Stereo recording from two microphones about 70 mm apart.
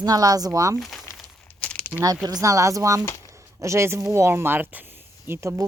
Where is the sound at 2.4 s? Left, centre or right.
Right.